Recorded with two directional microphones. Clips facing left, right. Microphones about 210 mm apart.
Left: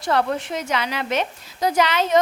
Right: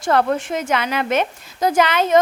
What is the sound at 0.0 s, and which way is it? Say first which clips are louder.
A woman's voice: right 4 dB; 50° right (ahead or behind).